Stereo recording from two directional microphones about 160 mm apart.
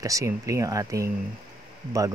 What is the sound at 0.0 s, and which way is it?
Speech, 20° right (ahead or behind).